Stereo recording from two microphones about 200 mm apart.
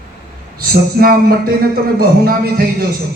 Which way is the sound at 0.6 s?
50° right (ahead or behind).